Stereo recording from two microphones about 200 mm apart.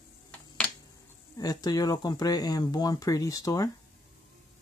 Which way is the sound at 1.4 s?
20° left (ahead or behind).